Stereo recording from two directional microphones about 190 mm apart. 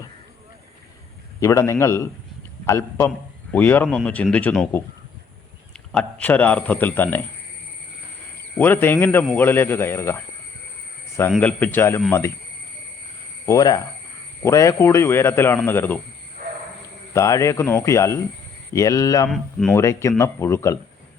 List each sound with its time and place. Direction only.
1.4 s speech: 15° left (ahead or behind)
5.9 s speech: 5° left (ahead or behind)
8.5 s speech: 10° left (ahead or behind)
11.3 s speech: 5° left (ahead or behind)
13.4 s speech: 20° left (ahead or behind)
17.2 s speech: 15° left (ahead or behind)
19.3 s speech: centre (ahead or behind)
19.7 s speech: 15° left (ahead or behind)